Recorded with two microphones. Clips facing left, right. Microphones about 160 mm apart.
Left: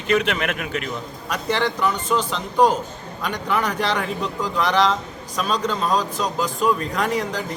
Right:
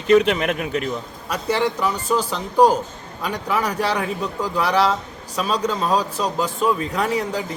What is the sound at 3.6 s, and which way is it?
Speech, 35° right (ahead or behind).